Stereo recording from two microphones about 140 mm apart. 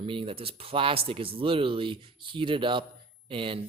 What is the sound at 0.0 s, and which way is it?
Speech, 40° right (ahead or behind).